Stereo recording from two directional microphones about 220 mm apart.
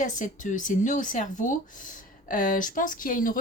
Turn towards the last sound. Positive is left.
turn(degrees=40)  # may be behind; listen again after turning